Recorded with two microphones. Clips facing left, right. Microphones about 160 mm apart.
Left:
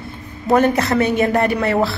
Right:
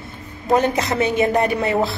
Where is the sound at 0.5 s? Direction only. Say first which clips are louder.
Left 4 dB; 15° right (ahead or behind).